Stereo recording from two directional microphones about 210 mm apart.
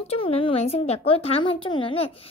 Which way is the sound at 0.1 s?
25° left (ahead or behind).